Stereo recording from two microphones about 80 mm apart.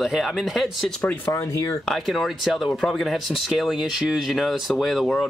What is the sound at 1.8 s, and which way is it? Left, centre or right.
A man's voice, centre.